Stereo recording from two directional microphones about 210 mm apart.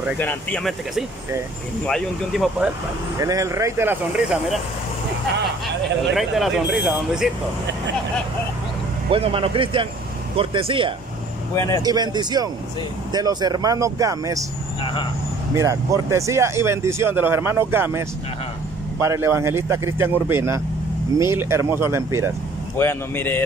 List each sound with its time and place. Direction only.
0.2 s speech: 5° left (ahead or behind)
3.2 s speech: 15° right (ahead or behind)
6.1 s speech: centre (ahead or behind)
9.1 s speech: 25° right (ahead or behind)
11.5 s speech: 15° left (ahead or behind)
11.8 s speech: 20° right (ahead or behind)
14.8 s speech: 25° left (ahead or behind)
15.5 s speech: 15° right (ahead or behind)
22.8 s speech: 10° left (ahead or behind)